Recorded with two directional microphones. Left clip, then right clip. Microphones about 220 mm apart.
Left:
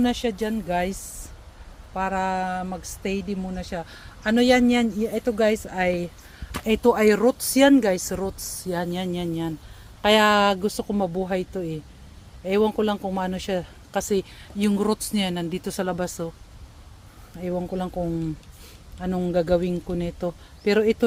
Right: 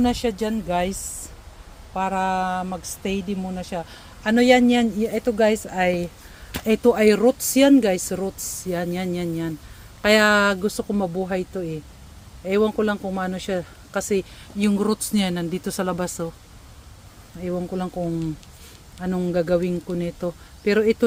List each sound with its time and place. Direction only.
0.0 s speech: centre (ahead or behind)
17.4 s speech: 5° left (ahead or behind)
18.9 s speech: 5° left (ahead or behind)